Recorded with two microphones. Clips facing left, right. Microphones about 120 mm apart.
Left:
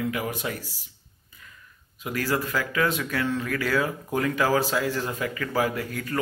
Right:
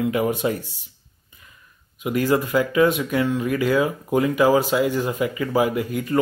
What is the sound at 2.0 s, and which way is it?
Speech, 20° right (ahead or behind).